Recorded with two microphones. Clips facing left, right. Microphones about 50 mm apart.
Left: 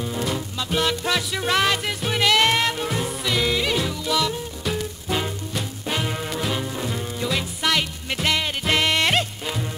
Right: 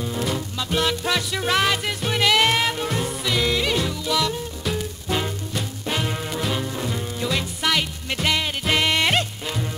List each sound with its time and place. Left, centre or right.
0.0 s music: centre